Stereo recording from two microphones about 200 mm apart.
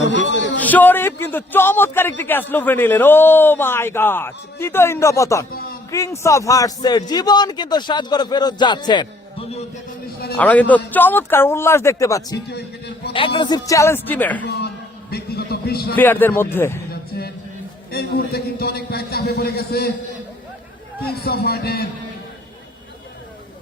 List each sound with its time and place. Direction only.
0.0 s speech: 65° left (ahead or behind)
0.6 s a man's voice: 10° left (ahead or behind)
5.5 s a sound: 45° left (ahead or behind)
5.9 s a man's voice: 15° left (ahead or behind)
10.3 s a man's voice: 10° left (ahead or behind)
12.5 s a sound: 55° left (ahead or behind)
13.1 s a man's voice: 25° left (ahead or behind); by 14.4 s 10° left (ahead or behind)
14.4 s a sound: 55° left (ahead or behind)
15.1 s music: 50° left (ahead or behind)
16.0 s a man's voice: 10° left (ahead or behind)
16.9 s a sound: 50° left (ahead or behind)
17.9 s a man's voice: 50° left (ahead or behind)
21.0 s a man's voice: 50° left (ahead or behind)